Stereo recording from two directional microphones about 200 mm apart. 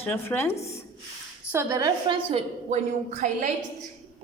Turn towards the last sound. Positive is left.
turn(degrees=-35)  # may be behind; listen again after turning